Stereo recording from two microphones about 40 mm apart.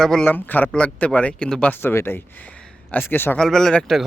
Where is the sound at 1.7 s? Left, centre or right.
Left.